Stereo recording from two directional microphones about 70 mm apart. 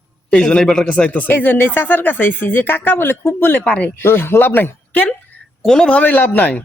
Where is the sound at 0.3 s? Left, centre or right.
Centre.